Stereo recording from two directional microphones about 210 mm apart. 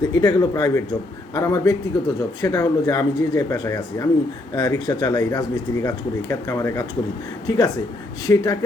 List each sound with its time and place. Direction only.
0.2 s speech: 20° left (ahead or behind)